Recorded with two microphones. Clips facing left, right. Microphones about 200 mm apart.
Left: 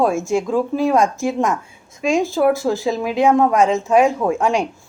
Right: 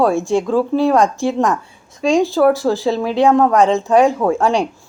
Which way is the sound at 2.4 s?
35° right (ahead or behind).